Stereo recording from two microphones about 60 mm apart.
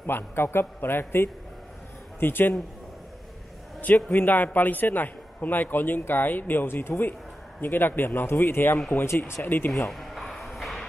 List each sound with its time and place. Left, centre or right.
0.0 s a man's voice: left
3.8 s a man's voice: left
9.8 s a sound: centre